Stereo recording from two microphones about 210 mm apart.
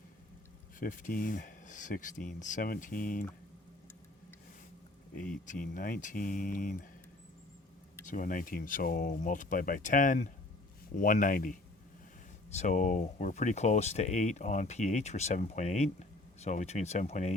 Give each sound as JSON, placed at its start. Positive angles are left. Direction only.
{"t": 0.8, "sound": "speech", "side_deg": 40}
{"t": 5.5, "sound": "speech", "side_deg": 40}
{"t": 8.0, "sound": "speech", "side_deg": 40}